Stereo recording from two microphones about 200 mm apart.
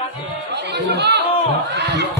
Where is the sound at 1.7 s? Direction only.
55° right (ahead or behind).